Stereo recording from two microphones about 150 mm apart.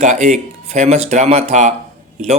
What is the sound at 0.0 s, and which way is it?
A man's voice, 50° right (ahead or behind).